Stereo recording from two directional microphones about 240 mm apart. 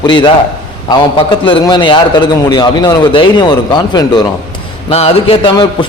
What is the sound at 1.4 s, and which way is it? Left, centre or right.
A man's voice, centre.